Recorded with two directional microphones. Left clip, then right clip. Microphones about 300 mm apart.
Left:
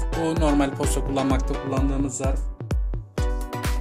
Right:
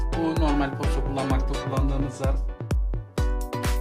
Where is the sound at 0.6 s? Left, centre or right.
Left.